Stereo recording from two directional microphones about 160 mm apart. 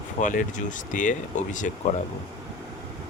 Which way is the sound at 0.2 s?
55° left (ahead or behind).